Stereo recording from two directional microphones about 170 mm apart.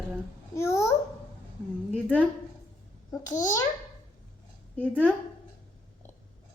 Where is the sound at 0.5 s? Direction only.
15° left (ahead or behind).